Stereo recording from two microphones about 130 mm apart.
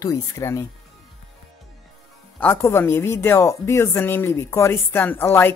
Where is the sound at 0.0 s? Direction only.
25° left (ahead or behind).